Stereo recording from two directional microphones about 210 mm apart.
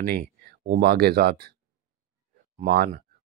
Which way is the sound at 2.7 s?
45° right (ahead or behind).